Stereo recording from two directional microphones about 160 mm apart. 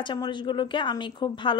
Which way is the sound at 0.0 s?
30° left (ahead or behind).